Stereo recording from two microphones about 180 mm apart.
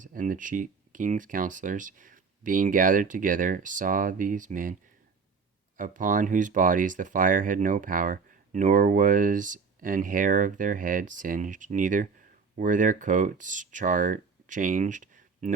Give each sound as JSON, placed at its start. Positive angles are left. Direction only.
{"t": 0.0, "sound": "speech", "side_deg": -45}